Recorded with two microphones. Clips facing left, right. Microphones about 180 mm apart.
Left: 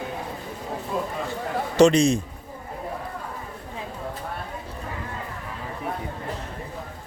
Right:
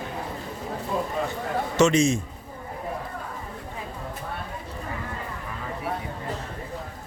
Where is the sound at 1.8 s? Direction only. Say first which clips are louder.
Left 4 dB; 35° left (ahead or behind).